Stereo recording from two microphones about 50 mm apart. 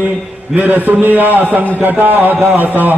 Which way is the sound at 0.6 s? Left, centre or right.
Right.